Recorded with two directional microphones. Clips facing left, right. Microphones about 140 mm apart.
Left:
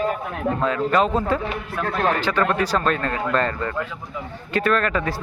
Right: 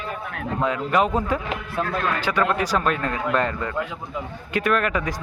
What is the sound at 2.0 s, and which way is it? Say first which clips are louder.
Speech: left 7 dB; 35° left (ahead or behind).